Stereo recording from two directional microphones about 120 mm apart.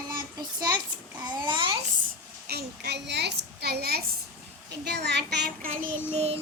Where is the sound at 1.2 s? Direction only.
35° right (ahead or behind).